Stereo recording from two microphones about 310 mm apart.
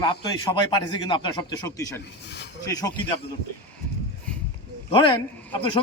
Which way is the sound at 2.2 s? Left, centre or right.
Left.